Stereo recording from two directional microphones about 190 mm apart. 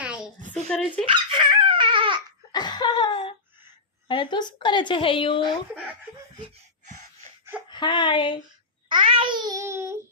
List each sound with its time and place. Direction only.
0.0 s a sound: 5° right (ahead or behind)
0.5 s speech: 5° left (ahead or behind)
1.0 s dog: 25° right (ahead or behind)
2.5 s a sound: 20° left (ahead or behind)
4.1 s a woman's voice: 25° left (ahead or behind)
6.4 s gasp: 40° right (ahead or behind)
7.7 s a woman's voice: 25° left (ahead or behind)
8.9 s babbling: 25° right (ahead or behind)